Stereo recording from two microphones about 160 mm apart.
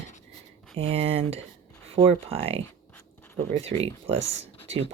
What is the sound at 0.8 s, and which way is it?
Speech, 35° right (ahead or behind).